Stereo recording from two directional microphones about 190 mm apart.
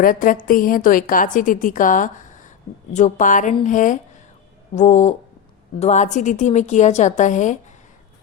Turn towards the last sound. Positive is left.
turn(degrees=40)  # may be behind; listen again after turning